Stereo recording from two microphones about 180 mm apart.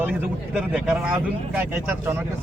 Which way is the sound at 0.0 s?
5° right (ahead or behind).